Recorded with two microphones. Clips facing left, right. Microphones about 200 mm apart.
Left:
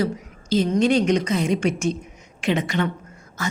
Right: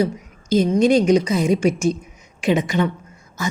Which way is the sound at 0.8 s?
35° right (ahead or behind).